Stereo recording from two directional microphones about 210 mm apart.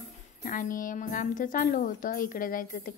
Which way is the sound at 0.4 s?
40° left (ahead or behind).